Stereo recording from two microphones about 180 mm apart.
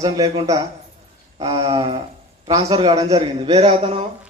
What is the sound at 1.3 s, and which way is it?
Speech, 35° right (ahead or behind).